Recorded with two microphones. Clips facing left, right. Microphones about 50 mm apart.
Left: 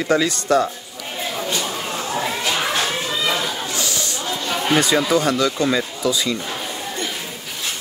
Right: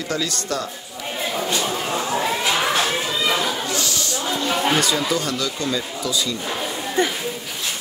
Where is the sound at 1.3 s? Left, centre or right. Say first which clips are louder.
Right 2 dB; centre.